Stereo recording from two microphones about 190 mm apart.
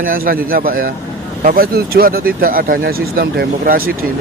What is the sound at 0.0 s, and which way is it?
Speech, 50° right (ahead or behind).